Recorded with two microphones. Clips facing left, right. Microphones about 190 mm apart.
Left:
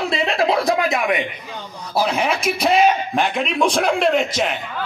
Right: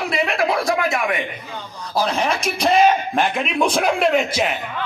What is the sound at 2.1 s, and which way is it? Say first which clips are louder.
A man's voice: left 1 dB; 5° left (ahead or behind).